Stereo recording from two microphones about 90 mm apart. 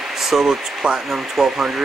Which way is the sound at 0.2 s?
5° right (ahead or behind).